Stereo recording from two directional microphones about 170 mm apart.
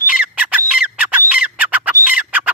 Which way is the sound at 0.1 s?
5° right (ahead or behind).